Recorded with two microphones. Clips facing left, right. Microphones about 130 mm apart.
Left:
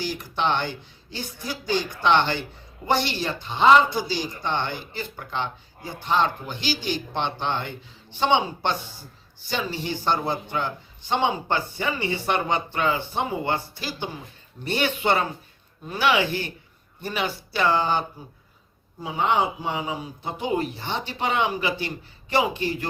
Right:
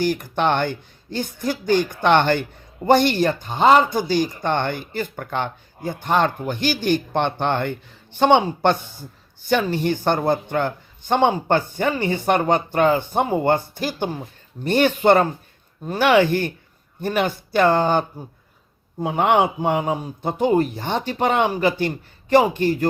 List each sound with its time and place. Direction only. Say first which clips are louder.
0.0 s speech: right 6 dB; 50° right (ahead or behind)